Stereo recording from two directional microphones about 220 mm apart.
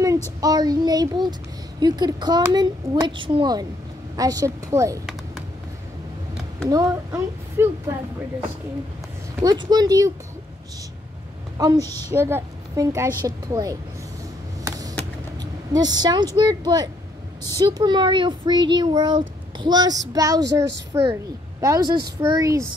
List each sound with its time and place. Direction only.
0.4 s a woman's voice: 15° right (ahead or behind)
6.3 s speech: 10° right (ahead or behind)
9.4 s a woman's voice: 15° right (ahead or behind)
11.5 s a woman's voice: 15° right (ahead or behind)
15.7 s a woman's voice: 20° right (ahead or behind)